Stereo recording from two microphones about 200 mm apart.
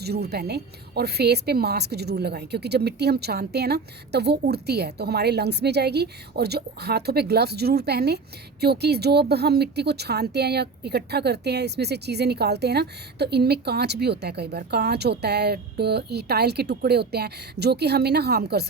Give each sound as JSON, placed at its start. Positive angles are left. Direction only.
{"t": 0.0, "sound": "a woman's voice", "side_deg": -55}